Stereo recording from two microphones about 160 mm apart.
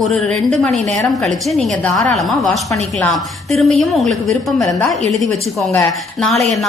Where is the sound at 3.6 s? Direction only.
Centre (ahead or behind).